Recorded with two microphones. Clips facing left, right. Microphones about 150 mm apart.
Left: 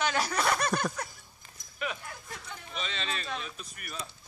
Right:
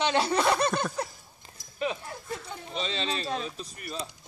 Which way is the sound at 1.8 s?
30° right (ahead or behind).